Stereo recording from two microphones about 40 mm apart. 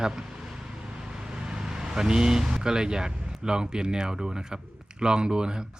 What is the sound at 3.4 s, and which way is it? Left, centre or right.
Speech, centre.